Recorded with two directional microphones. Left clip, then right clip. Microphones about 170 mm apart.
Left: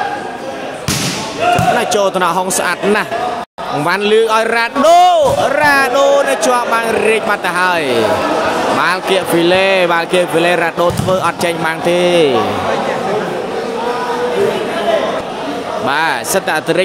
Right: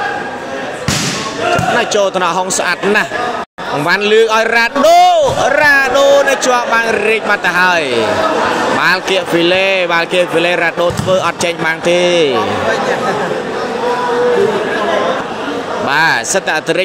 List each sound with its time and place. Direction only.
1.8 s a man's voice: 10° left (ahead or behind)
15.9 s speech: centre (ahead or behind)